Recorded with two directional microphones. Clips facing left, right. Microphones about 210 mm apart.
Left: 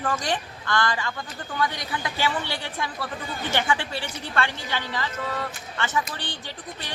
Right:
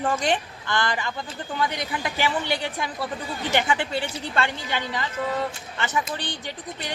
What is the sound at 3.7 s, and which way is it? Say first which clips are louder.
Speech: right 2 dB; 20° right (ahead or behind).